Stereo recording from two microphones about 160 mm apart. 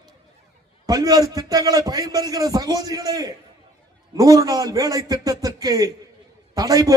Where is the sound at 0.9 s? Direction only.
25° right (ahead or behind).